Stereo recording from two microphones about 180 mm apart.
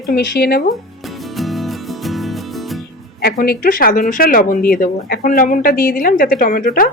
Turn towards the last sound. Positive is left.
turn(degrees=55)  # may be behind; listen again after turning